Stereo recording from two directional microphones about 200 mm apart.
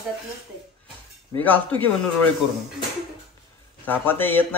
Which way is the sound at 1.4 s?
10° left (ahead or behind).